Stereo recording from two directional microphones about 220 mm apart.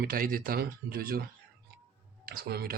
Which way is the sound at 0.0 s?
40° right (ahead or behind).